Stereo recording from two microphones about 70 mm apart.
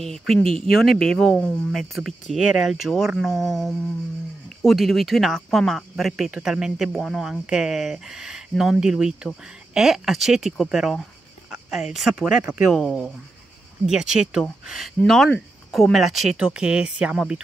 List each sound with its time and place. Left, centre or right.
0.0 s speech: centre
12.3 s speech: centre
12.6 s speech: centre
13.8 s speech: centre
15.0 s speech: centre
16.3 s speech: centre